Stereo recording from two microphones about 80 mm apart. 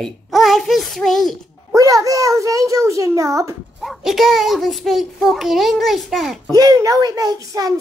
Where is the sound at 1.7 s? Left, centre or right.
Right.